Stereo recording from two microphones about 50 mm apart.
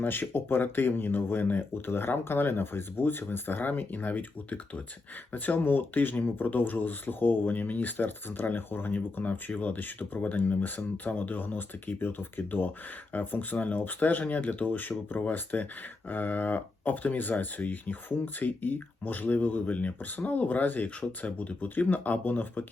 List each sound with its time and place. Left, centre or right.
0.0 s speech: left
11.9 s speech: left